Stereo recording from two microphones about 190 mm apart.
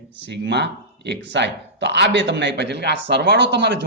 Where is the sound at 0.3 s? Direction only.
65° right (ahead or behind).